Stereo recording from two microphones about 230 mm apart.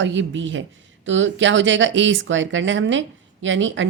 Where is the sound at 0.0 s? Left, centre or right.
Right.